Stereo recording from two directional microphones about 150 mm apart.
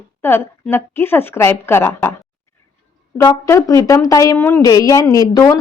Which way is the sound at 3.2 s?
20° left (ahead or behind).